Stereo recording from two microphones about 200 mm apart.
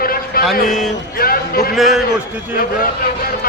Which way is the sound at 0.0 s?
45° left (ahead or behind).